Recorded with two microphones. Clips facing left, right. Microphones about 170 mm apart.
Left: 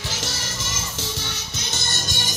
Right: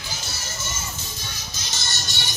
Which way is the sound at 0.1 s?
90° left.